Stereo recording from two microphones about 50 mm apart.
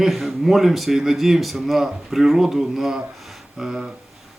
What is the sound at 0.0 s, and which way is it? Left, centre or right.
A man's voice, centre.